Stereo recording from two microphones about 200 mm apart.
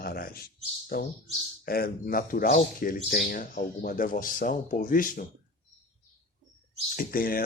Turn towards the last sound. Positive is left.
turn(degrees=45)  # may be behind; listen again after turning